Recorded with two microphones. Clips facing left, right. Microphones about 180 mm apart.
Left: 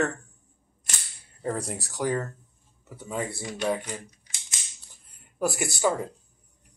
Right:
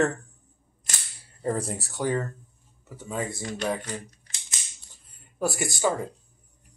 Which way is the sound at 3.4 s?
10° left (ahead or behind).